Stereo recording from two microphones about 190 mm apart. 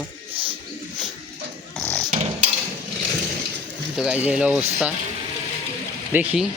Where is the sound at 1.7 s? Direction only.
5° left (ahead or behind).